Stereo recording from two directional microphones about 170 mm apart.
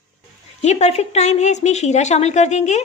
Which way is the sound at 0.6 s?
40° left (ahead or behind).